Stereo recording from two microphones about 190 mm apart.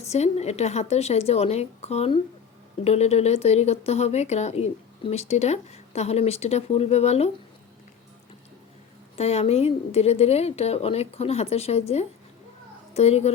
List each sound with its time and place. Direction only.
0.0 s speech: 35° left (ahead or behind)
9.1 s a child's voice: 35° left (ahead or behind)